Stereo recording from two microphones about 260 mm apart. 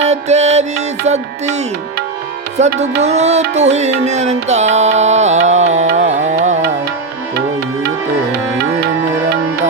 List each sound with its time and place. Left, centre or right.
0.0 s music: right